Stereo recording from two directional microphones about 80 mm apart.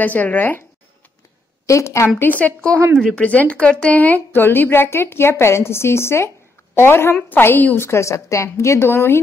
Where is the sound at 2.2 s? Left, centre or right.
Centre.